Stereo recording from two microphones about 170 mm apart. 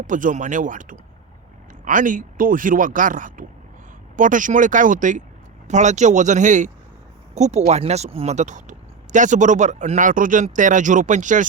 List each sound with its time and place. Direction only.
0.1 s speech: 50° right (ahead or behind)